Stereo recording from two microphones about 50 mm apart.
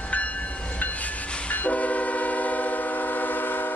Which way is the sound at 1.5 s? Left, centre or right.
Left.